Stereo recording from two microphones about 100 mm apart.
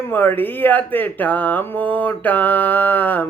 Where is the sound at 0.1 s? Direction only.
20° left (ahead or behind).